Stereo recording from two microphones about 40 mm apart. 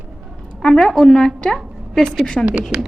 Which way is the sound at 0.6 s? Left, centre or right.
Centre.